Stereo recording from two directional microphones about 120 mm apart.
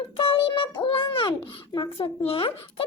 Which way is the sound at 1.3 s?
35° left (ahead or behind).